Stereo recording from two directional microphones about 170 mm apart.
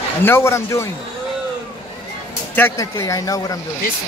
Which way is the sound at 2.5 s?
15° left (ahead or behind).